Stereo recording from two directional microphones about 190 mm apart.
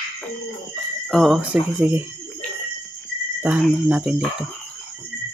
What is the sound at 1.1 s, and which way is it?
Speech, centre (ahead or behind).